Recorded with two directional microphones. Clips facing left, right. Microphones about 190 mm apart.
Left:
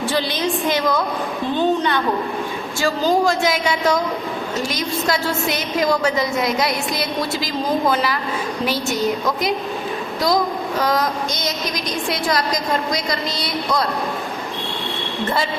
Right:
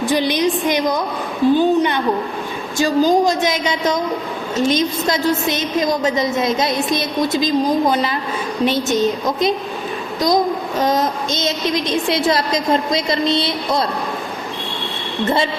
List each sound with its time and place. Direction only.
0.0 s a woman's voice: 15° right (ahead or behind)